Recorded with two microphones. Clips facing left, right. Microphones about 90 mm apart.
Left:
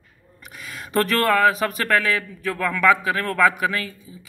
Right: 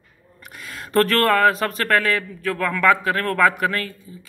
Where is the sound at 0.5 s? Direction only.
5° left (ahead or behind).